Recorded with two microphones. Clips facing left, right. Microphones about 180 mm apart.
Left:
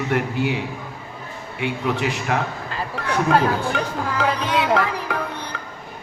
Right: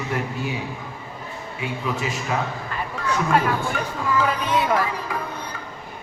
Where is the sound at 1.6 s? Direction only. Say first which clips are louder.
Left 4 dB; 70° left (ahead or behind).